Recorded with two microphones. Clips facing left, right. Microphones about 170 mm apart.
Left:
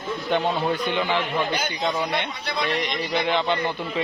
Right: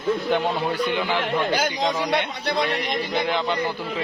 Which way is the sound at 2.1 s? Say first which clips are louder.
Right 4 dB; 70° right (ahead or behind).